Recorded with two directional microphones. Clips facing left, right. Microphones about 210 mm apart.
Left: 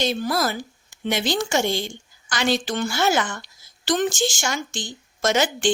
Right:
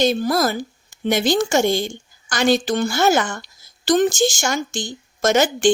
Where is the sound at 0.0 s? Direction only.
45° right (ahead or behind).